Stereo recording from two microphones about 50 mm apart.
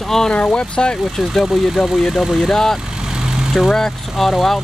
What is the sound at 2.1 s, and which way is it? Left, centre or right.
Speech, centre.